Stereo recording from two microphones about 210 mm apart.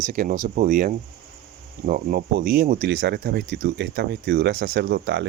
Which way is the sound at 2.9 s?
55° right (ahead or behind).